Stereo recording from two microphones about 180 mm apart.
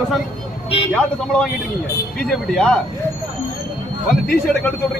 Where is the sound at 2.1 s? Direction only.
5° left (ahead or behind).